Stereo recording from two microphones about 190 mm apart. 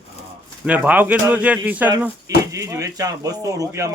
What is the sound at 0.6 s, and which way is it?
Speech, 5° right (ahead or behind).